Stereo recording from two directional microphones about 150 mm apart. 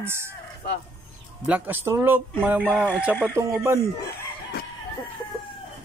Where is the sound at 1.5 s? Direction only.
15° right (ahead or behind).